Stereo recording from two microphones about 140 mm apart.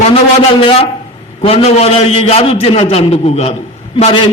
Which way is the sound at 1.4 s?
45° left (ahead or behind).